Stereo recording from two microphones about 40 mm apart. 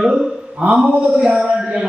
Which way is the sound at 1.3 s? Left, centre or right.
Centre.